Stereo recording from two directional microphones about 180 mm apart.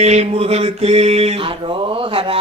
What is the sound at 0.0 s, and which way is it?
Mantra, 35° right (ahead or behind).